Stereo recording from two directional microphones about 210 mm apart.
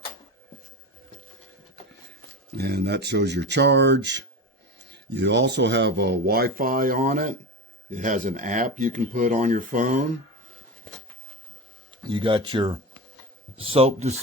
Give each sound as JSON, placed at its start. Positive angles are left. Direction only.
{"t": 2.5, "sound": "speech", "side_deg": -50}
{"t": 11.9, "sound": "speech", "side_deg": -25}